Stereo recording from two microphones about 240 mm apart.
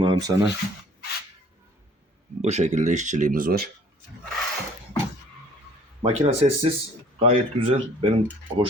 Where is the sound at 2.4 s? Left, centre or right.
Right.